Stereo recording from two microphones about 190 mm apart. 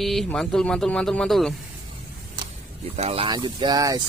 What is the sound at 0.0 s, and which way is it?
Speech, centre (ahead or behind).